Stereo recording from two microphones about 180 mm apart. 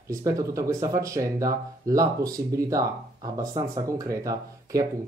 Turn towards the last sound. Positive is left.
turn(degrees=-20)  # may be behind; listen again after turning